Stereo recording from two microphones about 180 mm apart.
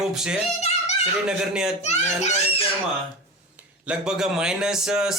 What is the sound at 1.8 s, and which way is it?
Speech, 40° left (ahead or behind).